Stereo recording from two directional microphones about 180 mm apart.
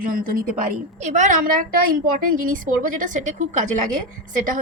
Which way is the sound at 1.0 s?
40° right (ahead or behind).